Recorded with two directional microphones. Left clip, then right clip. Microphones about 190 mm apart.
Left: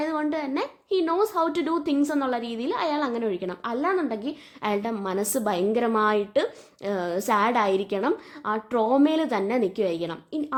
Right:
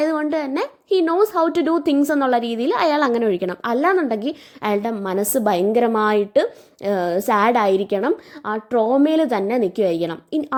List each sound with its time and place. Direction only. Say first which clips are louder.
0.0 s speech: right 7 dB; 25° right (ahead or behind)